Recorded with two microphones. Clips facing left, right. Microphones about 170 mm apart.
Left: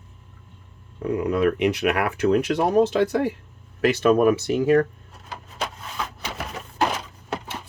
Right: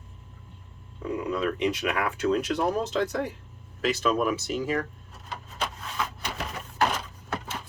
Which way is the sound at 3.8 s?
60° left (ahead or behind).